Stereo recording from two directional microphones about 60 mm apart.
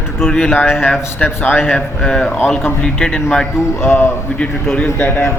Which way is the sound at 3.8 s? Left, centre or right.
Left.